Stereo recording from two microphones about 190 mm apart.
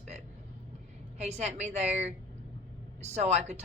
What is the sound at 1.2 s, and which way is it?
A woman's voice, 35° right (ahead or behind).